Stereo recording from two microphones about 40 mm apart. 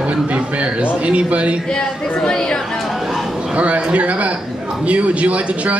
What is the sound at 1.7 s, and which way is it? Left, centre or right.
Speech, left.